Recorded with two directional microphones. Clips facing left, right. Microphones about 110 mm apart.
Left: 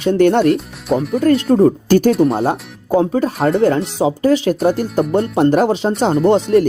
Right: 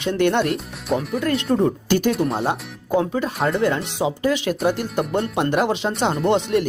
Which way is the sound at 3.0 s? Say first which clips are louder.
Left 6 dB; 40° left (ahead or behind).